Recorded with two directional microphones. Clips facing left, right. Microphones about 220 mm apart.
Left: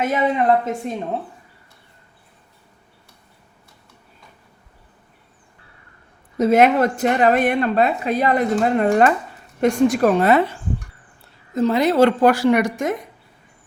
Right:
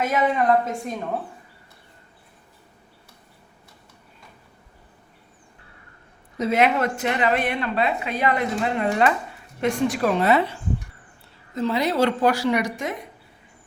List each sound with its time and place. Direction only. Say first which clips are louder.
0.1 s a woman's voice: left 2 dB; 25° left (ahead or behind)
6.4 s a woman's voice: left 6 dB; 45° left (ahead or behind)
11.5 s a woman's voice: left 6 dB; 45° left (ahead or behind)